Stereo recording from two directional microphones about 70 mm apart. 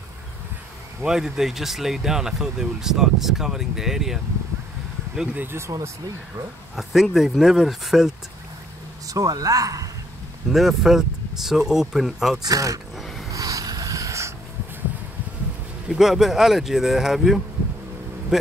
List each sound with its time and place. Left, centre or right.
1.0 s speech: centre
5.4 s speech: right
5.7 s speech: right
6.7 s speech: centre
9.0 s speech: right
10.5 s speech: centre
12.4 s speech: right
12.9 s a sound: centre
13.3 s a sound: right
15.9 s speech: centre